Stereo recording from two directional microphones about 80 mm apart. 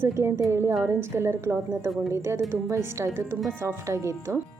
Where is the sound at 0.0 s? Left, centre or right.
Right.